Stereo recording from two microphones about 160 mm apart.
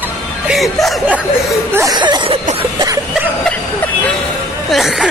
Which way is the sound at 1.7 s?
20° right (ahead or behind).